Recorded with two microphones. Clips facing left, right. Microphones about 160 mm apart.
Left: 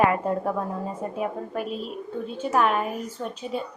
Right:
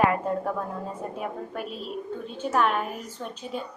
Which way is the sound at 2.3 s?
5° left (ahead or behind).